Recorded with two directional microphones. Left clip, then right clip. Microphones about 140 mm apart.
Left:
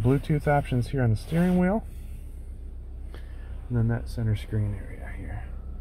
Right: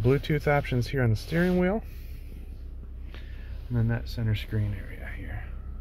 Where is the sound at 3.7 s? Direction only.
15° left (ahead or behind).